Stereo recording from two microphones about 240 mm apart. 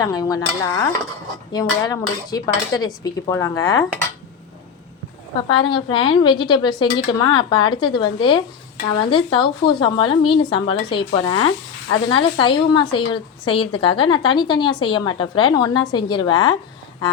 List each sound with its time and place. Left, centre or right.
0.0 s cutlery: centre
5.5 s speech: centre